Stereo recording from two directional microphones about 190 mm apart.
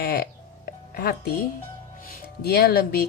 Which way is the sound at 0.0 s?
55° left (ahead or behind).